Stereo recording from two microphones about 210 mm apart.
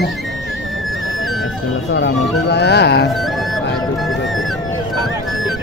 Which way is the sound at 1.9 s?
55° left (ahead or behind).